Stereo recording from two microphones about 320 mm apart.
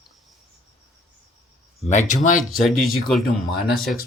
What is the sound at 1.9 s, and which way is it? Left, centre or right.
Speech, left.